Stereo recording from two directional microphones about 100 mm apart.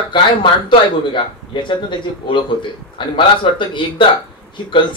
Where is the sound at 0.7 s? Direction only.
55° left (ahead or behind).